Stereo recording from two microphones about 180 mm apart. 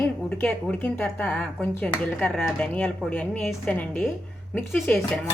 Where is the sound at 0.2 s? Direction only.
5° left (ahead or behind).